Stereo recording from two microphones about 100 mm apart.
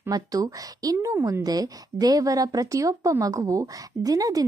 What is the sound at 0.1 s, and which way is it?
A woman's voice, 40° right (ahead or behind).